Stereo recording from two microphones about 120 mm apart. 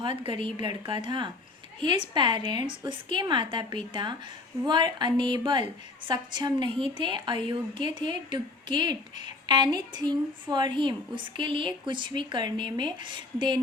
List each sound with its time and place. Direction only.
0.0 s a woman's voice: 45° right (ahead or behind)